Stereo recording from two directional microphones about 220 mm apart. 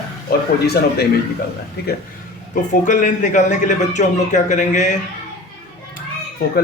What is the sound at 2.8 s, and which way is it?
A man's voice, 35° left (ahead or behind).